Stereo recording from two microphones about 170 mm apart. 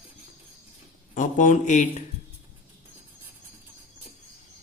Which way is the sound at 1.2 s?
50° left (ahead or behind).